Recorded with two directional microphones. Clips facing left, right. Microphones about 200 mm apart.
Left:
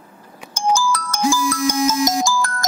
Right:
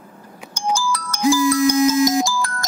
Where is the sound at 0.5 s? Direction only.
45° left (ahead or behind).